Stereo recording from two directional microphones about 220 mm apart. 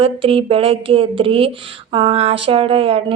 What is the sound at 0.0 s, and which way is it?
A woman's voice, 25° right (ahead or behind).